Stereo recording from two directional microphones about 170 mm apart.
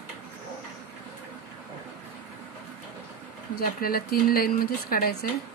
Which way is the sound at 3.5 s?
65° left (ahead or behind).